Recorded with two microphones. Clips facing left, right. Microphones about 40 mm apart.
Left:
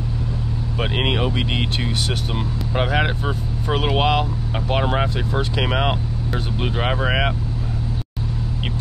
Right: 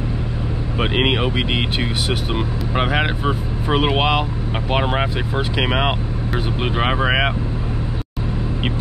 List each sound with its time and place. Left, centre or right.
0.7 s speech: centre